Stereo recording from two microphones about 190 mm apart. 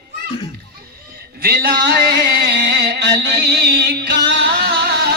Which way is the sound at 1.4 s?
50° right (ahead or behind).